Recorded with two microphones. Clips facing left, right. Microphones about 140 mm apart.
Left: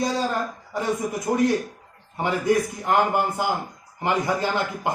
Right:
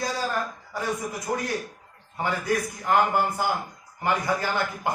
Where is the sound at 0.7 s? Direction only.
25° left (ahead or behind).